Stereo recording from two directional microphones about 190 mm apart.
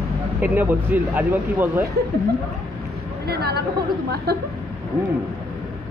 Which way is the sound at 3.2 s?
55° right (ahead or behind).